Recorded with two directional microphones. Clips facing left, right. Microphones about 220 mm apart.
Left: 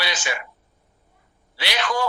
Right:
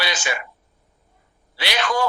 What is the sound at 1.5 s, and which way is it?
Speech, 50° right (ahead or behind).